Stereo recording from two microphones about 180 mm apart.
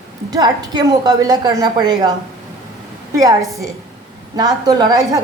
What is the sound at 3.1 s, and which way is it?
A woman's voice, 20° right (ahead or behind).